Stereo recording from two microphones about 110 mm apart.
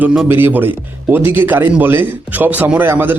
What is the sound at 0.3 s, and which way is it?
A man's voice, 20° right (ahead or behind).